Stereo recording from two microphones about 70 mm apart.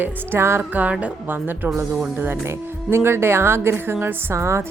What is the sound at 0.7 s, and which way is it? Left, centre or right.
Speech, right.